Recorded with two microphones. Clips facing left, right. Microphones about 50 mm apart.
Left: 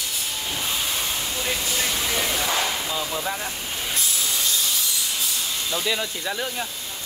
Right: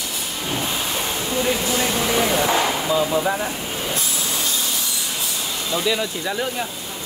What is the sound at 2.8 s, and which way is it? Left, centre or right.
Speech, right.